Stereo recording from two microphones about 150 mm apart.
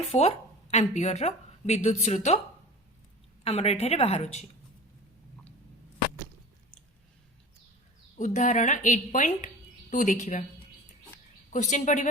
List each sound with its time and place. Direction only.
0.1 s a woman's voice: 45° left (ahead or behind)
3.4 s a woman's voice: 45° left (ahead or behind)
8.2 s a woman's voice: 55° left (ahead or behind)
11.5 s a woman's voice: 55° left (ahead or behind)